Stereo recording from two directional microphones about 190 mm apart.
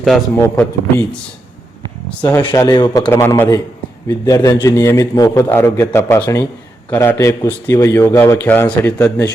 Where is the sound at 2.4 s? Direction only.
20° left (ahead or behind).